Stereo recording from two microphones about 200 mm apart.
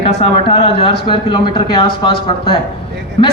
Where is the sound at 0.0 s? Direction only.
30° left (ahead or behind).